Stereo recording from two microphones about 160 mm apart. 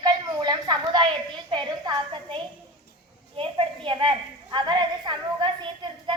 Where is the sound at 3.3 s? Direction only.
35° right (ahead or behind).